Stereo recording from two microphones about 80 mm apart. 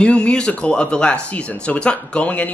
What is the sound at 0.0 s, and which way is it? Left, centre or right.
A man's voice, centre.